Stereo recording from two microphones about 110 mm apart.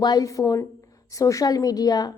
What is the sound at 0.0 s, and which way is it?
A woman's voice, 35° left (ahead or behind).